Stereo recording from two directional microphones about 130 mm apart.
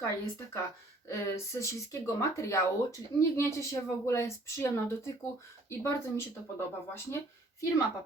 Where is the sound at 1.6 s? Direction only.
25° left (ahead or behind).